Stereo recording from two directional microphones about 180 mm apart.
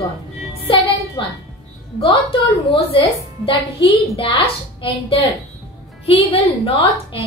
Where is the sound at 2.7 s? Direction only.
30° left (ahead or behind).